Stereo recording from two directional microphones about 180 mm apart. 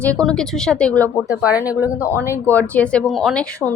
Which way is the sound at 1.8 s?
15° left (ahead or behind).